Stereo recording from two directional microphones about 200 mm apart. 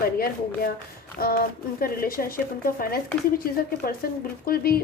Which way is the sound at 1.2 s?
50° left (ahead or behind).